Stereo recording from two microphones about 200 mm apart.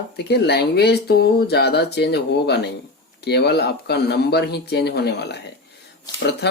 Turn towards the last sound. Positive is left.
turn(degrees=55)  # may be behind; listen again after turning